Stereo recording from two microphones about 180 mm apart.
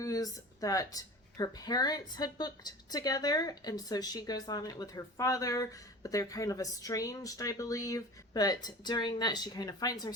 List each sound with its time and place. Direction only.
0.0 s speech: 20° left (ahead or behind)